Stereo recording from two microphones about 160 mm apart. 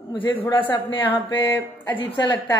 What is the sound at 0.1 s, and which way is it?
Speech, 30° left (ahead or behind).